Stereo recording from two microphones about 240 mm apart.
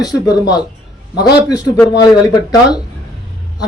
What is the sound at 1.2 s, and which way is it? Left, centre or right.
Speech, centre.